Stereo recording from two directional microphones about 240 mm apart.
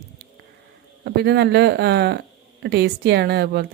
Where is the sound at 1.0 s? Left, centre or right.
Right.